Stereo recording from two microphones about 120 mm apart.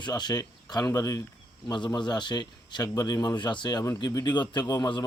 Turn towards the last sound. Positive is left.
turn(degrees=35)  # may be behind; listen again after turning